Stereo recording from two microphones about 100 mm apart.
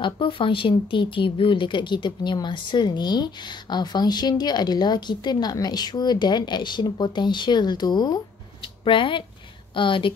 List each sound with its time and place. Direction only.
0.0 s speech: 60° left (ahead or behind); by 8.2 s 45° left (ahead or behind)
8.8 s speech: 55° left (ahead or behind)